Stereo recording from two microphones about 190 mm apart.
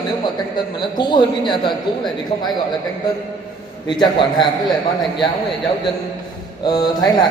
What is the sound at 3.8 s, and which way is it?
Speech, 25° left (ahead or behind).